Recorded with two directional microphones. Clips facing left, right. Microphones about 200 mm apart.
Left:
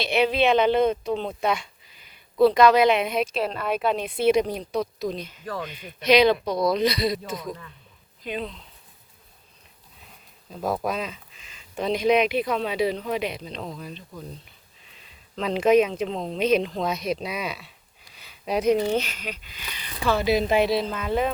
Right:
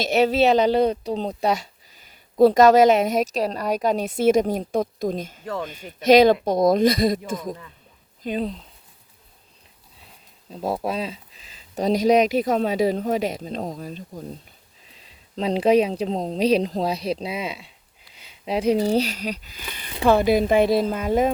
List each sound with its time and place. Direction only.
0.0 s speech: 45° right (ahead or behind)
10.5 s speech: 25° right (ahead or behind); by 20.8 s 50° right (ahead or behind)